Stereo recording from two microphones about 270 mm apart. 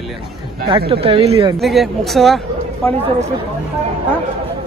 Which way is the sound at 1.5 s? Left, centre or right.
Centre.